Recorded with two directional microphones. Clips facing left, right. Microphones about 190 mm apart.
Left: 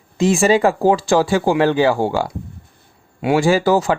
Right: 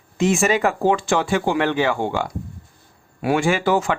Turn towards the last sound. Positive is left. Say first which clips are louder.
# left 4 dB
turn(degrees=35)  # may be behind; listen again after turning